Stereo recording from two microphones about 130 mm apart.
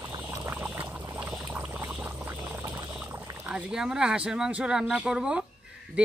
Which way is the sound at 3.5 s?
10° right (ahead or behind).